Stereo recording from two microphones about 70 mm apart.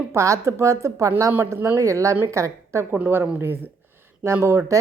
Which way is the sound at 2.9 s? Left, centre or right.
Right.